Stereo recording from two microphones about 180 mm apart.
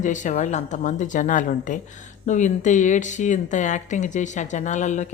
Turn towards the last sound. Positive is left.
turn(degrees=40)  # may be behind; listen again after turning